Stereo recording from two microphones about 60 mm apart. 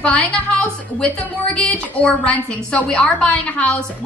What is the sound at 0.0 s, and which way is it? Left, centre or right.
A woman's voice, centre.